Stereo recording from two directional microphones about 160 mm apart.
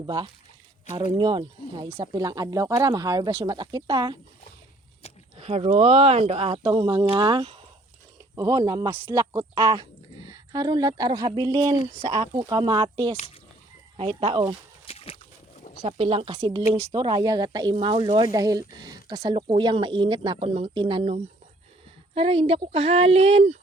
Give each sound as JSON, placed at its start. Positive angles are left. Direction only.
{"t": 0.0, "sound": "speech", "side_deg": -30}
{"t": 5.4, "sound": "speech", "side_deg": -40}
{"t": 6.6, "sound": "speech", "side_deg": -30}
{"t": 14.8, "sound": "a sound", "side_deg": 40}
{"t": 15.9, "sound": "speech", "side_deg": -35}